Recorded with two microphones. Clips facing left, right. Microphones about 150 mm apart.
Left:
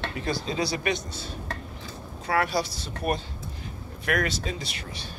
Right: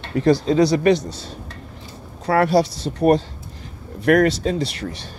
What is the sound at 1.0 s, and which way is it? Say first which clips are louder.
A woman's voice: right 5 dB; 75° right (ahead or behind).